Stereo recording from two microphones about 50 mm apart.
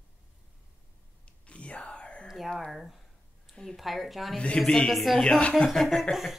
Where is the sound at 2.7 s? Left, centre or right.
Centre.